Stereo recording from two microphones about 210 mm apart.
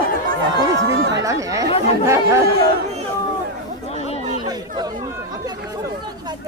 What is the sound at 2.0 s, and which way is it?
Speech, 15° right (ahead or behind).